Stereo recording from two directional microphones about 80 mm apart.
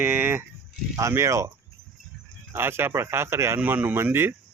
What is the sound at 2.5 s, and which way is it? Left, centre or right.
Speech, right.